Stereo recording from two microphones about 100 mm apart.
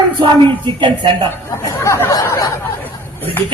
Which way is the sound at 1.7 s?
25° left (ahead or behind).